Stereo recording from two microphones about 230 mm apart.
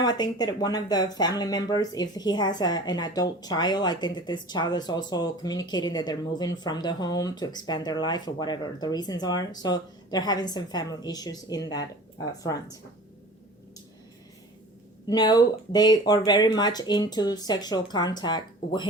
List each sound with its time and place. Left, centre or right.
0.0 s speech: centre
15.0 s speech: centre